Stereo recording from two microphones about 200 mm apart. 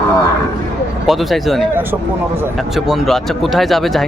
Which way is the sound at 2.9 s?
Centre (ahead or behind).